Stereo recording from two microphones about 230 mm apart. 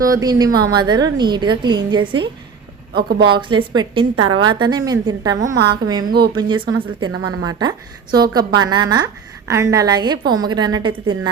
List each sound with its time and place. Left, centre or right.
0.1 s a woman's voice: centre
2.9 s speech: right
3.3 s a woman's voice: right
6.1 s speech: right
6.3 s a woman's voice: centre
7.1 s a woman's voice: right
7.4 s a woman's voice: centre